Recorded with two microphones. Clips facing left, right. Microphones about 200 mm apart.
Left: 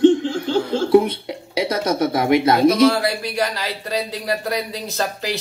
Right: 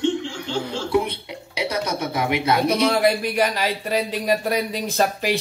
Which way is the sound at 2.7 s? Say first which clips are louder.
Left 3 dB; 15° right (ahead or behind).